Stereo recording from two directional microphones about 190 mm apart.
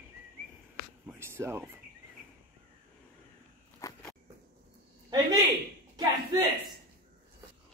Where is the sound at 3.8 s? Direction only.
15° left (ahead or behind).